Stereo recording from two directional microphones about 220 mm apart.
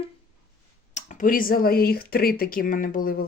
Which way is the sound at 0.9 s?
35° left (ahead or behind).